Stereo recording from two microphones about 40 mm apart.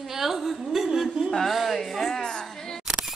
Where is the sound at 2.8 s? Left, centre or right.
Centre.